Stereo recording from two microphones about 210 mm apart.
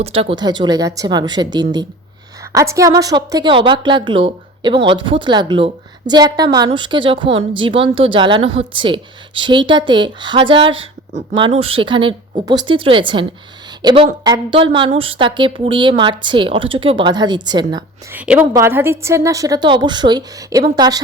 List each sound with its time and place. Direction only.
0.0 s speech: 25° right (ahead or behind)
18.1 s a woman's voice: 5° right (ahead or behind)